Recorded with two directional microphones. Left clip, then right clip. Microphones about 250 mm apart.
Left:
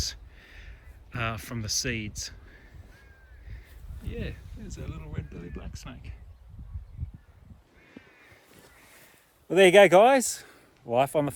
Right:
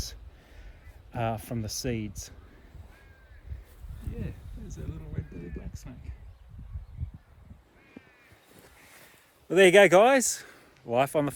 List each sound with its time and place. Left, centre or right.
0.0 s a sound: centre
1.1 s speech: centre
4.1 s speech: centre
8.8 s boat: centre
9.5 s speech: centre